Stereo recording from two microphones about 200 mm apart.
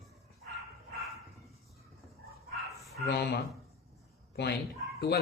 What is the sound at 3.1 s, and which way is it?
Speech, 55° left (ahead or behind).